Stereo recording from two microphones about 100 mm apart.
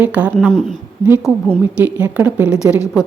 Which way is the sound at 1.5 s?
20° right (ahead or behind).